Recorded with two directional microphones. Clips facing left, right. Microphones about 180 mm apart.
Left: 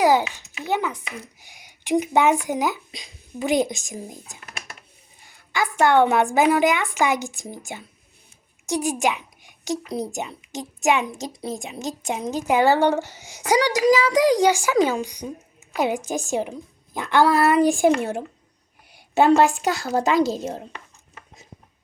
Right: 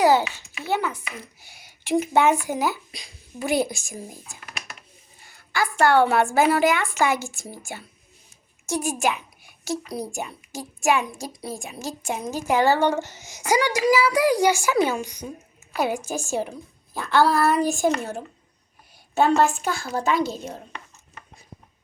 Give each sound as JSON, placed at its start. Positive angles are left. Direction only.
{"t": 0.0, "sound": "a child's voice", "side_deg": 15}
{"t": 19.8, "sound": "a child's voice", "side_deg": 35}